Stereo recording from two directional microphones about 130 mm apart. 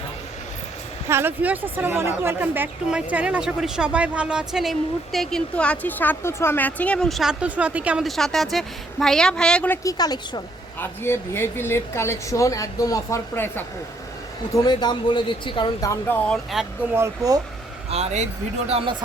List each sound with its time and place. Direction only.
1.0 s speech: 20° right (ahead or behind)
8.0 s speech: centre (ahead or behind)
9.8 s speech: 30° left (ahead or behind)
10.8 s speech: 20° left (ahead or behind)
14.5 s speech: 30° left (ahead or behind)
15.8 s speech: 20° left (ahead or behind)
16.9 s speech: 25° right (ahead or behind)
17.9 s speech: 55° right (ahead or behind)
18.7 s speech: 40° right (ahead or behind)